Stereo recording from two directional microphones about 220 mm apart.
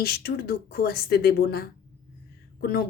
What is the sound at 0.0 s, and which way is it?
Speech, 45° left (ahead or behind).